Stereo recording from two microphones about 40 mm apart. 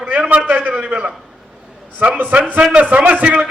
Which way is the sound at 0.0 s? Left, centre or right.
Right.